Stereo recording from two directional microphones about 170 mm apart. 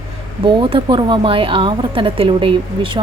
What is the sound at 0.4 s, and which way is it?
Speech, 30° right (ahead or behind).